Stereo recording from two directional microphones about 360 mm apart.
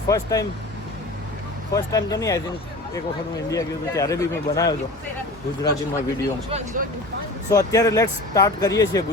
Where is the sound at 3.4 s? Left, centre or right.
Centre.